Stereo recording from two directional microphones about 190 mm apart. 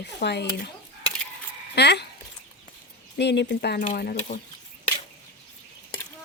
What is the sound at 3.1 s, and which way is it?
Speech, 65° left (ahead or behind).